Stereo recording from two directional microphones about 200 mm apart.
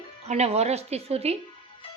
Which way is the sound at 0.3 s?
35° right (ahead or behind).